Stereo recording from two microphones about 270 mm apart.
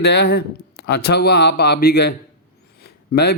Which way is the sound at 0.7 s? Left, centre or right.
Left.